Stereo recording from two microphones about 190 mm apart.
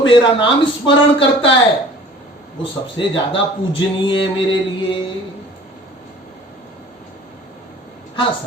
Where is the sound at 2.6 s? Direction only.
25° left (ahead or behind).